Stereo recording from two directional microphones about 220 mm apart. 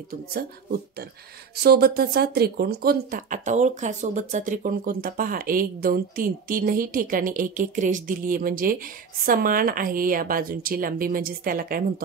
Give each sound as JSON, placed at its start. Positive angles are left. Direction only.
{"t": 0.3, "sound": "speech", "side_deg": -45}